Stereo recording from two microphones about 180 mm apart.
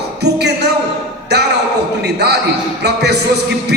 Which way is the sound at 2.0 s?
65° right (ahead or behind).